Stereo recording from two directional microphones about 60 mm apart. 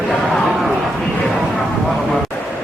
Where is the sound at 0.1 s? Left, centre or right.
Centre.